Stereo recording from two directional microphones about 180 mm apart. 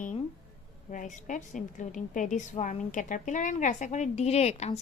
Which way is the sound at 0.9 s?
45° left (ahead or behind).